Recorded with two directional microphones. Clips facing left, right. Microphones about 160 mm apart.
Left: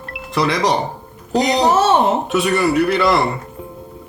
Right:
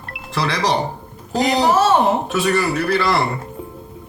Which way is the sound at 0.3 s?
20° left (ahead or behind).